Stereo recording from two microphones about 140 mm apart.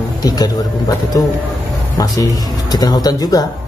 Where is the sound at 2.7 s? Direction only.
30° left (ahead or behind).